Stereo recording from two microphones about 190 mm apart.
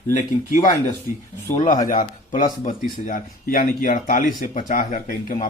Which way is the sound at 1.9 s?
45° left (ahead or behind).